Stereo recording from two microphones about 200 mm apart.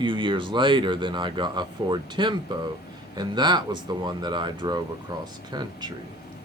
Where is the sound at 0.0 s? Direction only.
25° right (ahead or behind).